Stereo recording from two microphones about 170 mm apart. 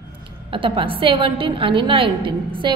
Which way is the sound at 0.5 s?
30° right (ahead or behind).